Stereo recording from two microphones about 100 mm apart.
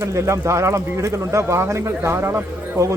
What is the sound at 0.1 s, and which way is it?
A man's voice, 30° right (ahead or behind).